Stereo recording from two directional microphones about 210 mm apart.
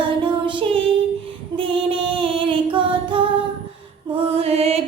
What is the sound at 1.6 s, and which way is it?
Music, 25° right (ahead or behind).